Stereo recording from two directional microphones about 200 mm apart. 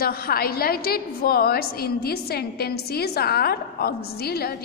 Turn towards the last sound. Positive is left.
turn(degrees=50)  # may be behind; listen again after turning